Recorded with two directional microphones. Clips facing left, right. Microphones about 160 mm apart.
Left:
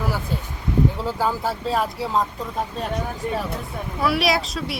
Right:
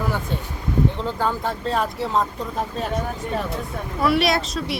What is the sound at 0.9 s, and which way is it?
Speech, 5° left (ahead or behind).